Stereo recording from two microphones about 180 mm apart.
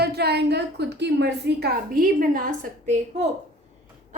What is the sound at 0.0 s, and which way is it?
A woman's voice, 65° right (ahead or behind).